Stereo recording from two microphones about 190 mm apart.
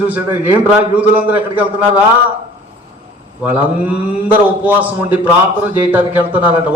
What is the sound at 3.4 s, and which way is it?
A man's voice, 10° right (ahead or behind).